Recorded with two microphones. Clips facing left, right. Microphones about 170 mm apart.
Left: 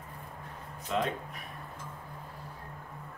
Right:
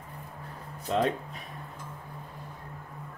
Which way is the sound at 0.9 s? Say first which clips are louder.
Right 4 dB; 35° right (ahead or behind).